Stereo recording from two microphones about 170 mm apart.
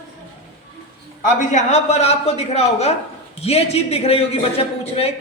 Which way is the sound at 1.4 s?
45° left (ahead or behind).